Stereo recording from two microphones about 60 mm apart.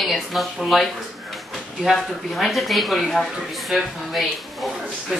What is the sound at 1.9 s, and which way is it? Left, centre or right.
Speech, centre.